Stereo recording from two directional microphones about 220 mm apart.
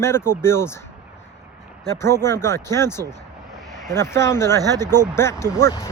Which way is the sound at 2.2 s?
10° left (ahead or behind).